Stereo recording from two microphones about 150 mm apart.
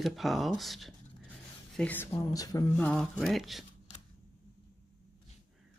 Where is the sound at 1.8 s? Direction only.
10° left (ahead or behind).